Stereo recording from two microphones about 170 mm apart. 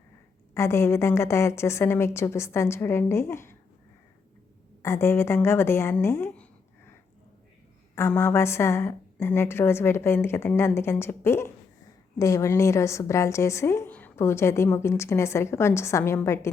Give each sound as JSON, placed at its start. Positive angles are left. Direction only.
{"t": 0.5, "sound": "a woman's voice", "side_deg": 15}
{"t": 4.8, "sound": "a woman's voice", "side_deg": 15}
{"t": 7.9, "sound": "a woman's voice", "side_deg": 15}